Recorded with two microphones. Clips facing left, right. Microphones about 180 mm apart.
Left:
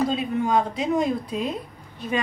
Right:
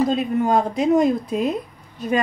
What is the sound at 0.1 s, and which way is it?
A woman's voice, 50° right (ahead or behind).